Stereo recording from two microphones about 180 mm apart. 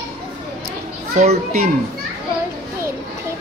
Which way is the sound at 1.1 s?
40° right (ahead or behind).